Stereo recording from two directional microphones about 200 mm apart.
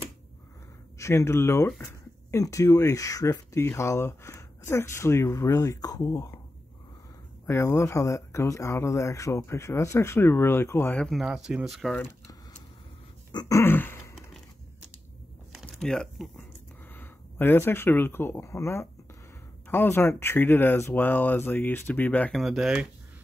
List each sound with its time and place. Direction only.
0.9 s speech: 15° left (ahead or behind)
7.4 s speech: 15° left (ahead or behind)
13.3 s a sound: 20° left (ahead or behind)
15.6 s speech: 5° left (ahead or behind)